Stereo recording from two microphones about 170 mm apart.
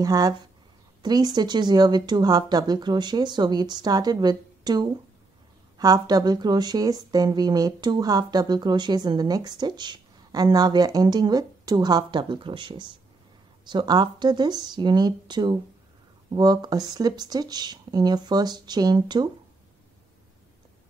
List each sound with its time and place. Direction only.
0.0 s speech: 20° right (ahead or behind)